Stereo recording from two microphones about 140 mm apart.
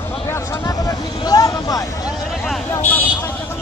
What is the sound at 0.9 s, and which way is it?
Vehicle, 25° left (ahead or behind).